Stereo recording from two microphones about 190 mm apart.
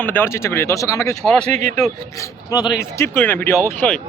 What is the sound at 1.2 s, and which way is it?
Speech, 5° left (ahead or behind).